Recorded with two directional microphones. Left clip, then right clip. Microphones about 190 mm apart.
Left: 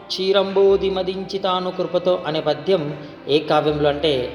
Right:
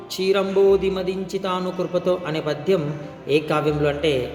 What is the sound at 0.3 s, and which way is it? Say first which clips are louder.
A man's voice: left 2 dB; 25° right (ahead or behind).